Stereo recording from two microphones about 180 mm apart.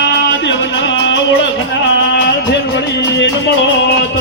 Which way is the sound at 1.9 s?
75° left (ahead or behind).